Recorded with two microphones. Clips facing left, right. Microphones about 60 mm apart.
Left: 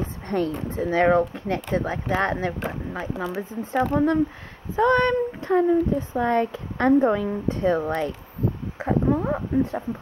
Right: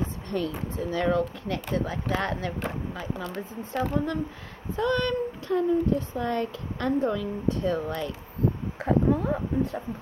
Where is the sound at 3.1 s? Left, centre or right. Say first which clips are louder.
Left 6 dB; centre.